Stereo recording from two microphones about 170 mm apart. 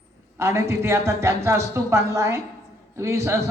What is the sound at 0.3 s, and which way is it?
A woman's voice, 15° right (ahead or behind).